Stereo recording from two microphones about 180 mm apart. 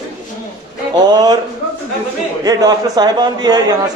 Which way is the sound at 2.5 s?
20° right (ahead or behind).